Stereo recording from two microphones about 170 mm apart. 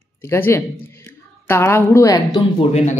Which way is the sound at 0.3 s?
15° left (ahead or behind).